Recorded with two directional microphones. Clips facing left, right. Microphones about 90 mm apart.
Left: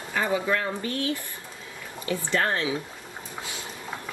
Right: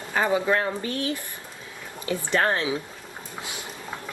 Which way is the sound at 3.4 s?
20° right (ahead or behind).